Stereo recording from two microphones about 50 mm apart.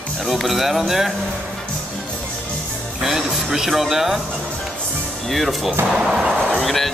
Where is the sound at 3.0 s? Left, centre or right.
Centre.